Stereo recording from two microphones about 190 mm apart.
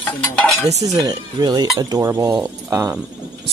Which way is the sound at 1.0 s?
20° right (ahead or behind).